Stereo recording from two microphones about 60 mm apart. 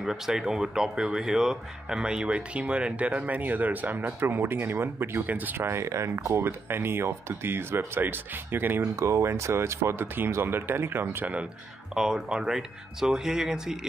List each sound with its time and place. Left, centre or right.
0.0 s speech: centre; by 5.2 s right
5.2 s speech: right
5.9 s speech: right
6.4 s speech: right
9.0 s speech: right
11.9 s speech: centre